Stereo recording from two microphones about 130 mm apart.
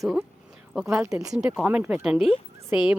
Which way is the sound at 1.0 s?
25° right (ahead or behind).